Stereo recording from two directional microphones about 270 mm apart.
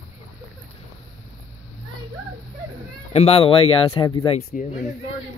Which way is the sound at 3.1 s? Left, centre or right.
Left.